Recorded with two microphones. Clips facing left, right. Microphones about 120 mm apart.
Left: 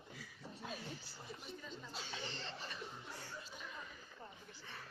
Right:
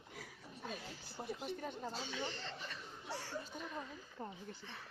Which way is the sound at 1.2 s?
65° right (ahead or behind).